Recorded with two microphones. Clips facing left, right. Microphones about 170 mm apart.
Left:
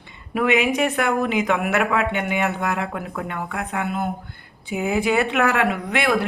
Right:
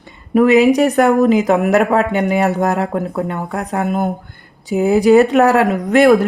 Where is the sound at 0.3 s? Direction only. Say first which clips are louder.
Right 9 dB; 35° right (ahead or behind).